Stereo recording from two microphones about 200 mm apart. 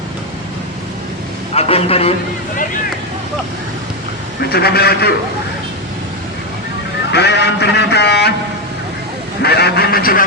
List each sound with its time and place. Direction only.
1.5 s a man's voice: 30° left (ahead or behind)
4.4 s speech: 50° left (ahead or behind)
7.1 s a man's voice: 55° left (ahead or behind)
9.4 s speech: 55° left (ahead or behind)